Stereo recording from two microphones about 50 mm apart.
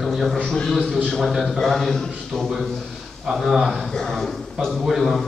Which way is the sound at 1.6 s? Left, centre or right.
Centre.